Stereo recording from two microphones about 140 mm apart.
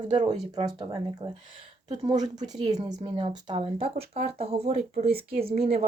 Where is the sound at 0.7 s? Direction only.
30° right (ahead or behind).